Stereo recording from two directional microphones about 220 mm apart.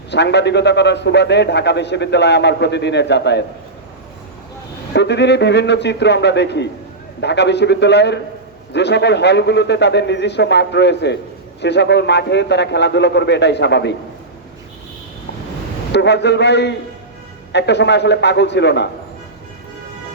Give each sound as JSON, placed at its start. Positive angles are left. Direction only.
{"t": 0.1, "sound": "a man's voice", "side_deg": 50}
{"t": 4.9, "sound": "a man's voice", "side_deg": 50}
{"t": 15.9, "sound": "a man's voice", "side_deg": 50}